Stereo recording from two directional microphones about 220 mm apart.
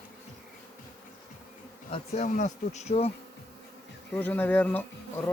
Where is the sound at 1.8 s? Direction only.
30° left (ahead or behind).